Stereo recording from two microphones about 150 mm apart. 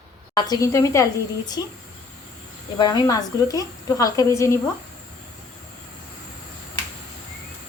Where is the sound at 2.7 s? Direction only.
25° left (ahead or behind).